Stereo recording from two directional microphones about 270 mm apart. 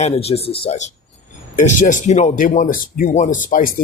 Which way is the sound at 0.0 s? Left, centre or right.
Left.